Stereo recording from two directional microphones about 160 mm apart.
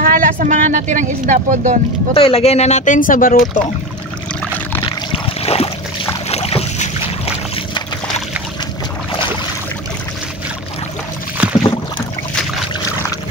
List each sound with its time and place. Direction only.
0.0 s speech: 60° right (ahead or behind)
2.1 s speech: 35° left (ahead or behind); by 3.4 s 60° left (ahead or behind)
5.1 s a sound: 40° left (ahead or behind)
6.2 s boat: 40° left (ahead or behind)
11.4 s boat: 10° right (ahead or behind)